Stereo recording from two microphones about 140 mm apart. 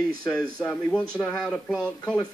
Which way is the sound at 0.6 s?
10° left (ahead or behind).